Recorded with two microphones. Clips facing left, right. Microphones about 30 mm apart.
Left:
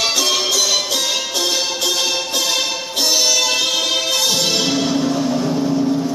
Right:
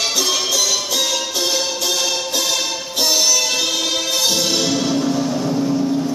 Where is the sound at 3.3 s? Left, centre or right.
Centre.